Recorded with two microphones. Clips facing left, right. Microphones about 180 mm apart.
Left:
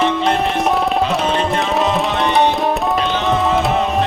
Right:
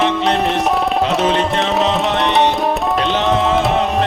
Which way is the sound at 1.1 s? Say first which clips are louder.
Right 2 dB; centre (ahead or behind).